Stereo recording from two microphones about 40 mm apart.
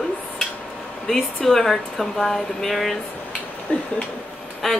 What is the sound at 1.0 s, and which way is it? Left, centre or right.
Speech, centre.